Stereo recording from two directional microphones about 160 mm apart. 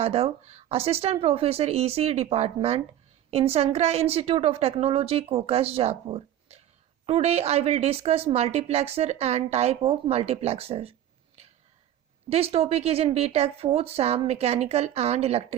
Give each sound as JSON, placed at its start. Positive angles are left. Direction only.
{"t": 0.0, "sound": "a woman's voice", "side_deg": -40}
{"t": 12.3, "sound": "a woman's voice", "side_deg": -40}